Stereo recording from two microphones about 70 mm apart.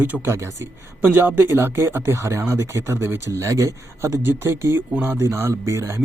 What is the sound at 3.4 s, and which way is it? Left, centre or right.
Speech, right.